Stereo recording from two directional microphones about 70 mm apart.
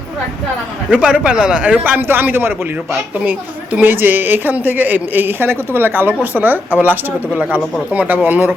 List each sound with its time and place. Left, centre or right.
0.9 s a woman's voice: centre